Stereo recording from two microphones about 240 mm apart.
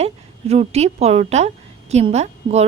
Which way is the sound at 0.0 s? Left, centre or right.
Right.